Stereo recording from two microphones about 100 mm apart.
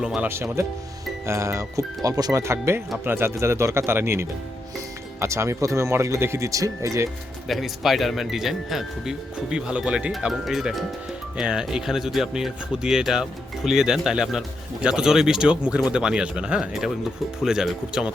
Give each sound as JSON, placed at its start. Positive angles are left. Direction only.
{"t": 0.2, "sound": "speech", "side_deg": -25}
{"t": 7.4, "sound": "speech", "side_deg": 0}